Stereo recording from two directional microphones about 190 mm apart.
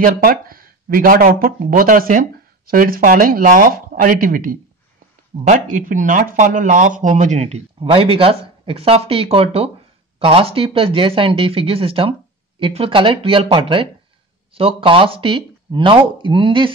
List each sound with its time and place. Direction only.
0.0 s speech: 50° right (ahead or behind); by 16.7 s 25° right (ahead or behind)